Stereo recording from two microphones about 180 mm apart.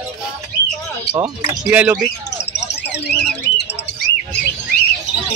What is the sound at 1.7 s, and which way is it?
Speech, 5° right (ahead or behind).